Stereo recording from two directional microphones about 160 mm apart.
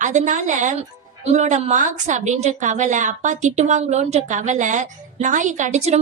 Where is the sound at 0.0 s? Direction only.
50° right (ahead or behind).